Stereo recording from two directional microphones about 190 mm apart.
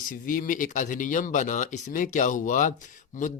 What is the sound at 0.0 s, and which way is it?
Speech, 45° left (ahead or behind).